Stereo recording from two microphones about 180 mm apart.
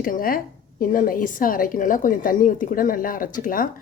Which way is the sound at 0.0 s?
50° left (ahead or behind).